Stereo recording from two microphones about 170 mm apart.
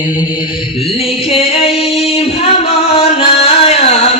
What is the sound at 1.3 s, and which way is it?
Singing, 35° left (ahead or behind).